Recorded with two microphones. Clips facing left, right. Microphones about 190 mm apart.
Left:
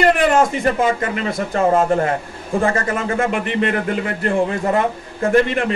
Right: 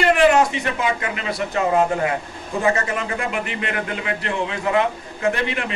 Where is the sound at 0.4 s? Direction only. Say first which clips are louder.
Left 4 dB; 50° left (ahead or behind).